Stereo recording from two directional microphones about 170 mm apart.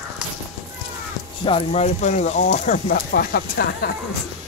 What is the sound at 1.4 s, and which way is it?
Speech, 35° left (ahead or behind).